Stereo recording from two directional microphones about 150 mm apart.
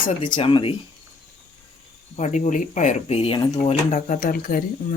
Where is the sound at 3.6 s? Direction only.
55° left (ahead or behind); by 4.6 s 75° left (ahead or behind).